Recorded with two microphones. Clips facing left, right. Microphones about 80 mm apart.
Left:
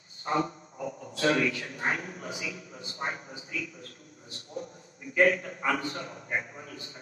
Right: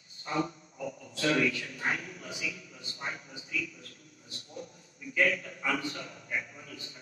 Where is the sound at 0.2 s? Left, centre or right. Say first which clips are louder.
Left 4 dB; left.